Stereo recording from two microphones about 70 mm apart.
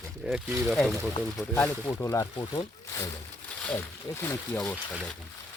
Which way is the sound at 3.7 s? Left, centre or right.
Left.